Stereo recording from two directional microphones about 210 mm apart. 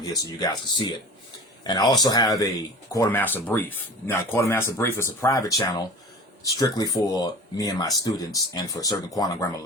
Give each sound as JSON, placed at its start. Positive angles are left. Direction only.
{"t": 0.0, "sound": "speech", "side_deg": 20}